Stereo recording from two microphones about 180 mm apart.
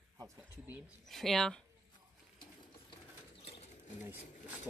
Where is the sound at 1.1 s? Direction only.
Centre (ahead or behind).